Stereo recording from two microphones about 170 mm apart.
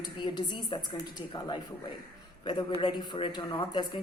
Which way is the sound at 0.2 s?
25° left (ahead or behind).